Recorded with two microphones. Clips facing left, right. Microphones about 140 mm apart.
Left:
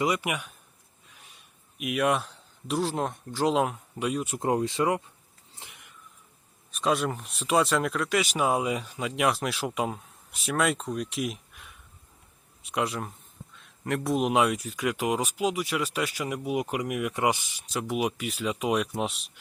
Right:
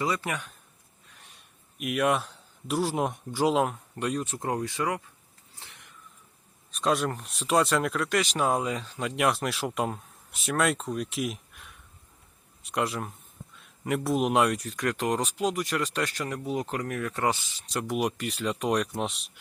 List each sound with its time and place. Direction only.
0.0 s a man's voice: 15° left (ahead or behind)
4.4 s speech: 20° left (ahead or behind)
5.5 s a sound: 15° left (ahead or behind)
6.7 s speech: centre (ahead or behind)
9.0 s speech: centre (ahead or behind)
17.7 s speech: centre (ahead or behind)